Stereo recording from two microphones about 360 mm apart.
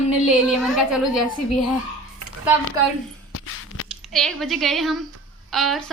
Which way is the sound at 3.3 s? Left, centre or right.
Left.